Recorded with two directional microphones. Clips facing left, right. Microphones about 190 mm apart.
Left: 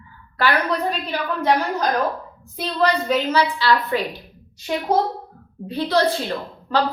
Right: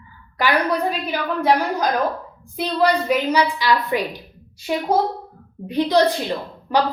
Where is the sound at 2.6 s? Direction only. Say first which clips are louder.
Right 2 dB; 10° right (ahead or behind).